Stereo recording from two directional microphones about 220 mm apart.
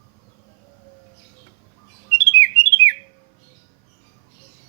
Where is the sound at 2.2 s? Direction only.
20° left (ahead or behind).